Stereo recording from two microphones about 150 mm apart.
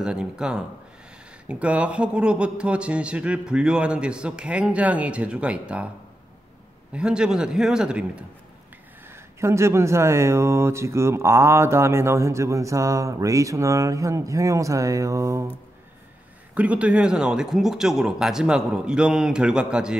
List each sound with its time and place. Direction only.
0.0 s speech: 5° right (ahead or behind)
6.9 s speech: 5° right (ahead or behind)
9.1 s speech: 20° right (ahead or behind)
16.5 s speech: 10° right (ahead or behind)